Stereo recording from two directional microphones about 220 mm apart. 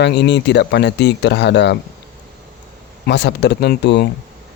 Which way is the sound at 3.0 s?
50° left (ahead or behind).